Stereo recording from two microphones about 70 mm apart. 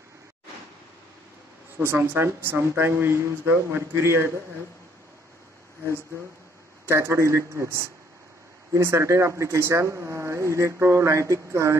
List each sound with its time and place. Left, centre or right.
1.8 s speech: right
6.9 s speech: right